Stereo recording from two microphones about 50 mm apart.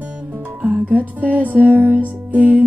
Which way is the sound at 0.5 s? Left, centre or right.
Right.